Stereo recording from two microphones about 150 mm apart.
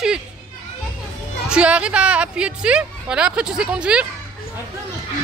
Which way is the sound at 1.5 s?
5° right (ahead or behind).